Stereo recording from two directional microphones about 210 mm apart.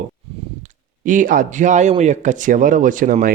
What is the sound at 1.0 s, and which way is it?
Speech, 40° right (ahead or behind).